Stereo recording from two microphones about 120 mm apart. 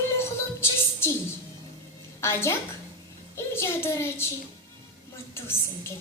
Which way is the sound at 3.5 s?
20° left (ahead or behind).